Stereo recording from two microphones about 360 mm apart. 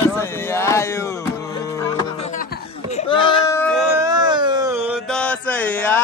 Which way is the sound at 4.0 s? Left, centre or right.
Centre.